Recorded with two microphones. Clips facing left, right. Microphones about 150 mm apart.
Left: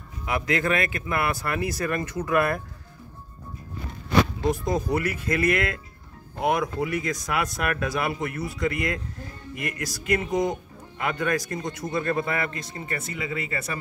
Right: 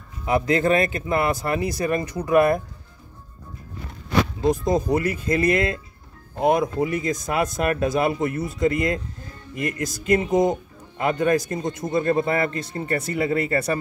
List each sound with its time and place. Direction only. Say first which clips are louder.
0.2 s speech: right 6 dB; 30° right (ahead or behind)
4.4 s speech: right 4 dB; 20° right (ahead or behind); by 13.7 s 40° right (ahead or behind)